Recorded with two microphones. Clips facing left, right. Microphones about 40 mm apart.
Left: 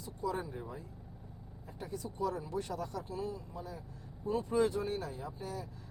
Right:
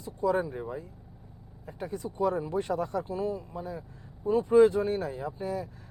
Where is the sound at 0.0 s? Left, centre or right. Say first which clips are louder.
Right 10 dB; right.